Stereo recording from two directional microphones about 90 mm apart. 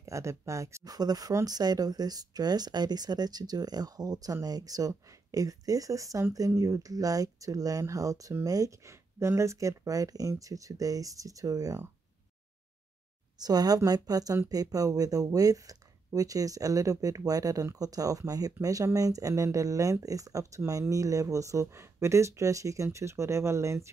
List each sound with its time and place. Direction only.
0.0 s a woman's voice: 35° right (ahead or behind)
0.9 s a woman's voice: 45° right (ahead or behind)
13.4 s a woman's voice: 45° right (ahead or behind)